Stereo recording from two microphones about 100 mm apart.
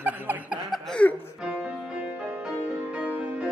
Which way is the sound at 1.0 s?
10° left (ahead or behind).